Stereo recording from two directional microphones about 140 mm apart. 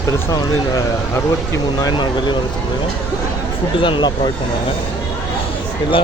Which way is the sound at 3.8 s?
35° left (ahead or behind).